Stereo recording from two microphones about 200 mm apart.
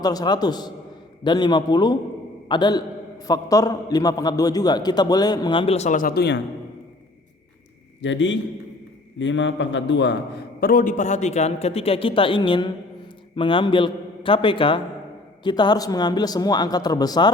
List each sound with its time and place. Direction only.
0.0 s a man's voice: 20° left (ahead or behind); by 6.4 s 55° left (ahead or behind)
8.0 s a man's voice: 65° left (ahead or behind); by 17.3 s 20° left (ahead or behind)